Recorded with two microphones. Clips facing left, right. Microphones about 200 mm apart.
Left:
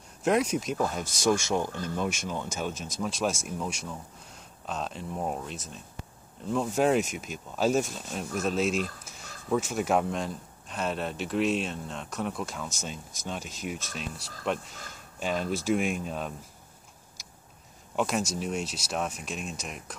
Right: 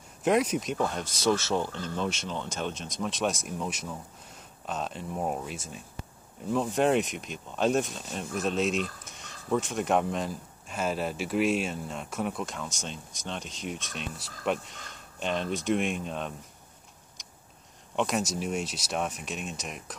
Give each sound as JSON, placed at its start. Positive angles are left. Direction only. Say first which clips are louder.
{"t": 0.2, "sound": "speech", "louder": "even", "side_deg": 0}
{"t": 17.9, "sound": "speech", "louder": "even", "side_deg": 0}